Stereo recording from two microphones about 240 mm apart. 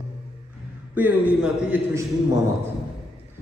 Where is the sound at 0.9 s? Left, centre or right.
Centre.